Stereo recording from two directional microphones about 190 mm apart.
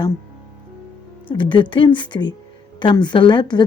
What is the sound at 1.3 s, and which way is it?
A woman's voice, 25° left (ahead or behind).